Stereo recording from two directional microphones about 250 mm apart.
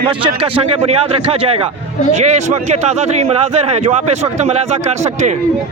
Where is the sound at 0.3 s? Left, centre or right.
Right.